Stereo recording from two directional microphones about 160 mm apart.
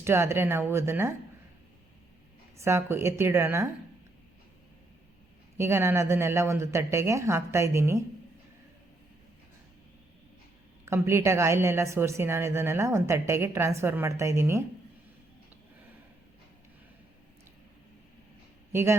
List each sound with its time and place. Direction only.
0.0 s a woman's voice: 15° right (ahead or behind)
2.6 s a woman's voice: 15° right (ahead or behind)
5.5 s a woman's voice: 15° right (ahead or behind)
10.8 s a woman's voice: 15° right (ahead or behind)
18.7 s a woman's voice: 15° right (ahead or behind)